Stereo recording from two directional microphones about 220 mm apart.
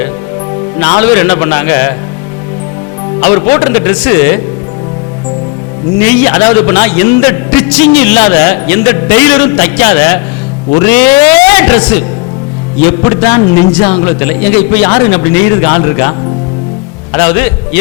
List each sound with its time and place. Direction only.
0.8 s a man's voice: 10° left (ahead or behind)
3.2 s a man's voice: 15° left (ahead or behind)
6.0 s a man's voice: 10° left (ahead or behind)